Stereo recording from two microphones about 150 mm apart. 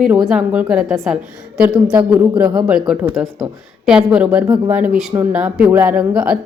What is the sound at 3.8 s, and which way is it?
A woman's voice, 5° right (ahead or behind).